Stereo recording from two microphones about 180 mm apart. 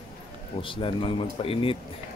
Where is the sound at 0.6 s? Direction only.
30° left (ahead or behind).